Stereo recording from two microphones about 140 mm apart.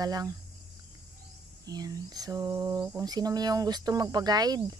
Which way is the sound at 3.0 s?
30° right (ahead or behind).